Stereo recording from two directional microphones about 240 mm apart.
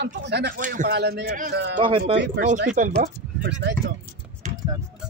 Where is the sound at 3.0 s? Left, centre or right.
Right.